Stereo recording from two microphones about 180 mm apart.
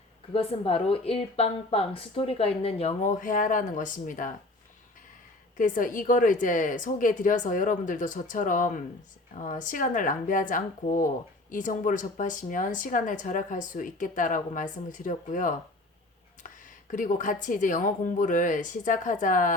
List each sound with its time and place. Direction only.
0.3 s a woman's voice: 30° left (ahead or behind)
5.5 s speech: 45° left (ahead or behind)